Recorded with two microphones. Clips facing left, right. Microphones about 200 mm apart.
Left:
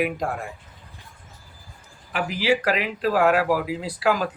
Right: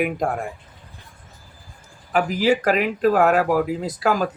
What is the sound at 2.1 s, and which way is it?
Speech, 45° right (ahead or behind).